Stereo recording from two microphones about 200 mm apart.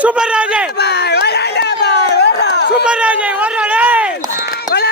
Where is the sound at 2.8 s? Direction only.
5° right (ahead or behind).